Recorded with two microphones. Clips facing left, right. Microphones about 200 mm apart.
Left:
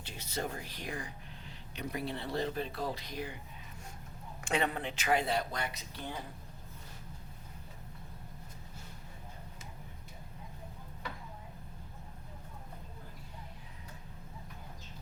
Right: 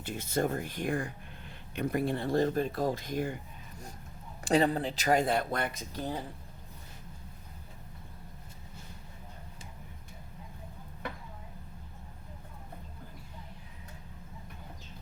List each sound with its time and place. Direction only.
0.0 s speech: 50° right (ahead or behind)
4.4 s speech: 35° right (ahead or behind)